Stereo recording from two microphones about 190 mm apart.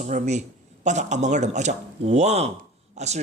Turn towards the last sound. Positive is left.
turn(degrees=-35)  # may be behind; listen again after turning